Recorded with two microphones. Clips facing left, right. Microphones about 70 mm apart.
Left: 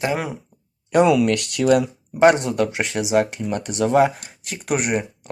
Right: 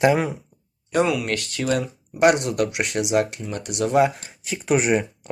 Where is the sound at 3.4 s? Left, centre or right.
Left.